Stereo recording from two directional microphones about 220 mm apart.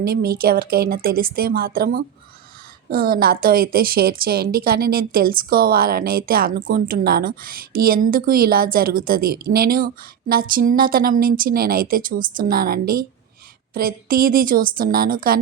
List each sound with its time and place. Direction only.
0.0 s a woman's voice: 45° right (ahead or behind)